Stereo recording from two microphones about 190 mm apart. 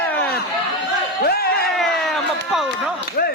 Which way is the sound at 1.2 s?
55° left (ahead or behind).